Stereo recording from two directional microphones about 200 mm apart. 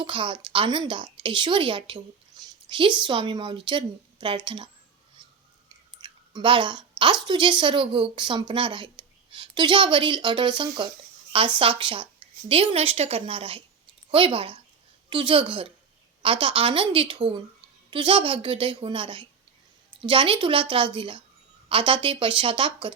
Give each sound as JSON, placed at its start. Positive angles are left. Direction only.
{"t": 0.0, "sound": "a woman's voice", "side_deg": -25}
{"t": 6.0, "sound": "a sound", "side_deg": -25}
{"t": 7.0, "sound": "a woman's voice", "side_deg": -25}